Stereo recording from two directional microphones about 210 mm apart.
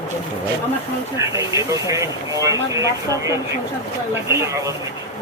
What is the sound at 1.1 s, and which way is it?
Speech, 15° right (ahead or behind).